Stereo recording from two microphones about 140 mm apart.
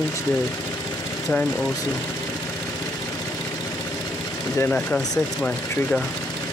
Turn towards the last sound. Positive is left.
turn(degrees=10)  # may be behind; listen again after turning